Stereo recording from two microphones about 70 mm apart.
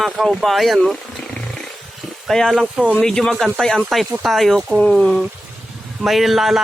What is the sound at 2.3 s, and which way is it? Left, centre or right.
Speech, centre.